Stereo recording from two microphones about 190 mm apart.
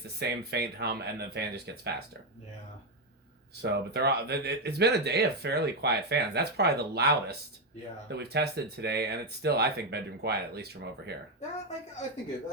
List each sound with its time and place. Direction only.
0.2 s speech: 60° right (ahead or behind)
3.6 s speech: 60° right (ahead or behind)